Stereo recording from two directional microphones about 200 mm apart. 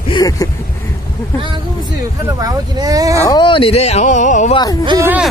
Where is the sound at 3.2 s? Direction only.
25° left (ahead or behind).